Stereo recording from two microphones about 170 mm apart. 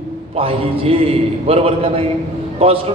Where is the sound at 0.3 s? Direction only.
35° right (ahead or behind).